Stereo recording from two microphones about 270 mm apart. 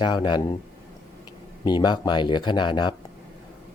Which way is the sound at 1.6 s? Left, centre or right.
Centre.